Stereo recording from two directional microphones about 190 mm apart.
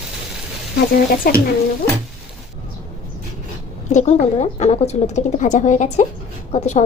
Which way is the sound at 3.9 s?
35° left (ahead or behind).